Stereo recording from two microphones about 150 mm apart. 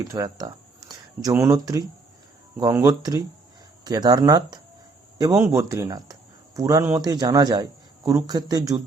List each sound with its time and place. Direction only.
0.0 s a man's voice: 25° right (ahead or behind)